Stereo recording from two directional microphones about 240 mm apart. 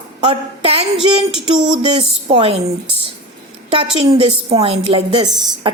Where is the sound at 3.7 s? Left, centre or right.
Right.